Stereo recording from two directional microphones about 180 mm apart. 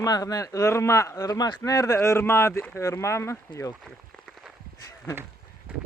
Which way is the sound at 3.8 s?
Centre (ahead or behind).